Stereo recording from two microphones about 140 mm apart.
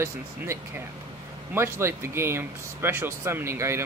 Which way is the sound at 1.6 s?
20° right (ahead or behind).